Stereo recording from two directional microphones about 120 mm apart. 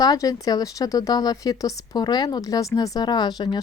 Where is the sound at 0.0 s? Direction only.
30° left (ahead or behind).